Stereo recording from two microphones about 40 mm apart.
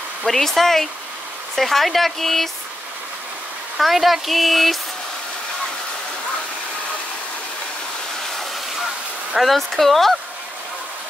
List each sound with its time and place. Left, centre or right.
0.2 s speech: centre
3.7 s speech: centre
9.3 s speech: centre